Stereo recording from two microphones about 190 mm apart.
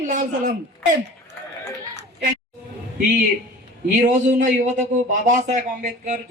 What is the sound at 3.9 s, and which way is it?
A man's voice, 40° right (ahead or behind).